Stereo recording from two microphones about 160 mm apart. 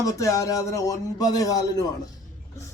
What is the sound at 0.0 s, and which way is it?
Speech, 20° left (ahead or behind).